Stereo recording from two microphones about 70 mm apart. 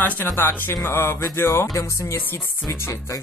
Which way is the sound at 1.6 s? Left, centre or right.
Left.